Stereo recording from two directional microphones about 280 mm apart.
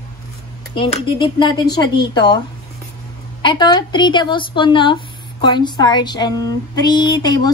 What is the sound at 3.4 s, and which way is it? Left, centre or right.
Speech, centre.